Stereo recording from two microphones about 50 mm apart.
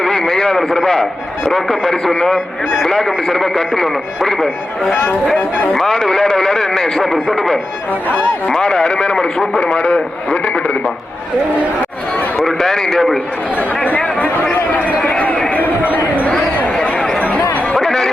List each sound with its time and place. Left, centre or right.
0.0 s radio: centre
1.5 s speech: centre
4.4 s speech: centre
8.1 s speech: centre
10.2 s speech: left
12.4 s speech: centre
13.8 s a sound: left
14.7 s run: left
15.4 s a sound: left
16.8 s chatter: left
17.7 s chatter: centre